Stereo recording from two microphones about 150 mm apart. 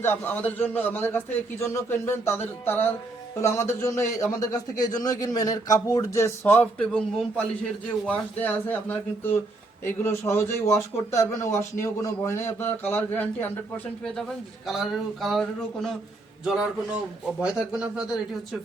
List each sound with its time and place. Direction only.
0.0 s a man's voice: 15° left (ahead or behind)
14.7 s speech: centre (ahead or behind)